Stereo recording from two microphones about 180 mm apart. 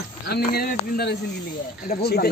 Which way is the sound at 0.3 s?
55° left (ahead or behind).